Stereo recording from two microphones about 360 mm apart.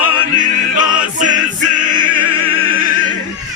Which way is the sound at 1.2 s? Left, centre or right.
Centre.